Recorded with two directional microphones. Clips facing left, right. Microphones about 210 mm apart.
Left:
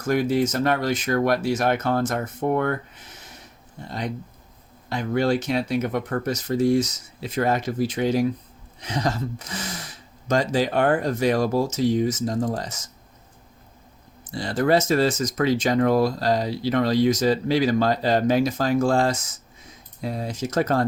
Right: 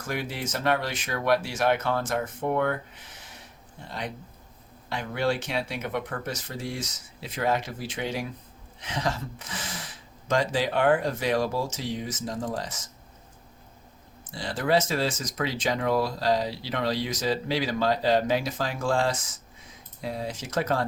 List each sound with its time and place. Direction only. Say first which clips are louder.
0.0 s speech: left 11 dB; 45° left (ahead or behind)
4.9 s speech: left 5 dB; 40° left (ahead or behind)
14.3 s speech: left 6 dB; 45° left (ahead or behind)